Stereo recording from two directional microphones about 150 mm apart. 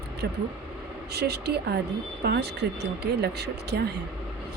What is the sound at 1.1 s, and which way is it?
Speech, 90° right.